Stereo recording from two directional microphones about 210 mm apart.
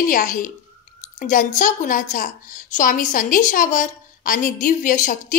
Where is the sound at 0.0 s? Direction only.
40° left (ahead or behind).